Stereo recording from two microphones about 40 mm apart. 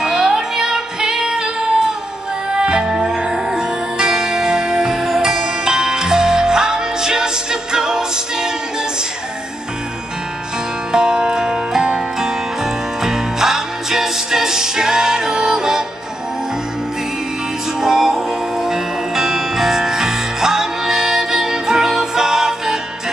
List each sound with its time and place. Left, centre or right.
0.0 s music: centre
3.2 s music: centre
10.9 s music: centre
17.7 s music: centre